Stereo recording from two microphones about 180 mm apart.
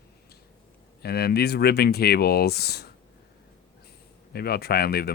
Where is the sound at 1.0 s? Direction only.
60° left (ahead or behind).